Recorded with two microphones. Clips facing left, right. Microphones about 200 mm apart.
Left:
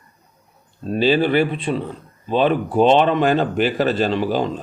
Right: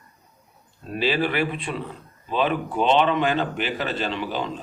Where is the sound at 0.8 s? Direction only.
30° left (ahead or behind).